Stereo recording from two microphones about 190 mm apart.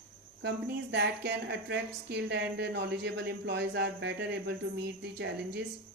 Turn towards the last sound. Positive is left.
turn(degrees=-60)  # may be behind; listen again after turning